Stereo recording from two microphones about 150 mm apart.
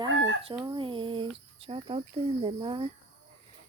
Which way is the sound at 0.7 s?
35° right (ahead or behind).